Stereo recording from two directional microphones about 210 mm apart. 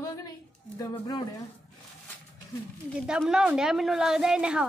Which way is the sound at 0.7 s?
15° left (ahead or behind).